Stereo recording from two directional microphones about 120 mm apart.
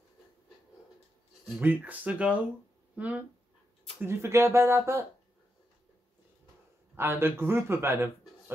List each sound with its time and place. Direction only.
1.6 s speech: 15° right (ahead or behind)
4.0 s speech: 20° right (ahead or behind)
7.0 s speech: 20° right (ahead or behind)